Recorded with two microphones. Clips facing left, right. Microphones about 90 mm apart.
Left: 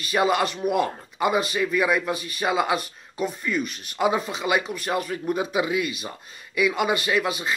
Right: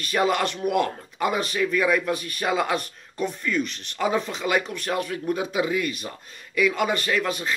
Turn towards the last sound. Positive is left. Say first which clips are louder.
# left 1 dB
turn(degrees=5)  # may be behind; listen again after turning